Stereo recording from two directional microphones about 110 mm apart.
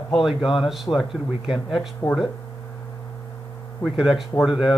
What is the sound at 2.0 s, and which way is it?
Speech, 20° left (ahead or behind).